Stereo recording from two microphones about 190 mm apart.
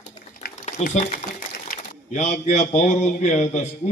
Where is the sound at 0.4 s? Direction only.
55° left (ahead or behind).